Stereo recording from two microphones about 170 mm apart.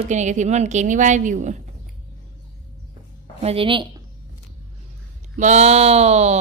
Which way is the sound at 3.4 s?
30° right (ahead or behind).